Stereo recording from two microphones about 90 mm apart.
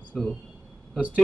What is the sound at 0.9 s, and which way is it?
Speech, 15° right (ahead or behind).